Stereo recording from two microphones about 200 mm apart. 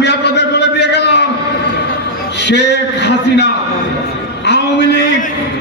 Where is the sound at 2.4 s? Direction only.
60° left (ahead or behind).